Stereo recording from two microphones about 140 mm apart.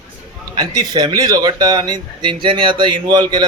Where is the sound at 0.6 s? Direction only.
30° right (ahead or behind).